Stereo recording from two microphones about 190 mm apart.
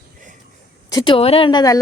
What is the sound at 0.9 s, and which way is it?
Speech, 25° left (ahead or behind).